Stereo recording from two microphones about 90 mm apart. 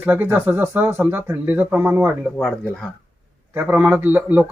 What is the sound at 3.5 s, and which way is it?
Speech, 15° right (ahead or behind).